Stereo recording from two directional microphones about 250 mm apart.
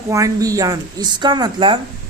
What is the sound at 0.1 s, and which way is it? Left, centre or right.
A woman's voice, centre.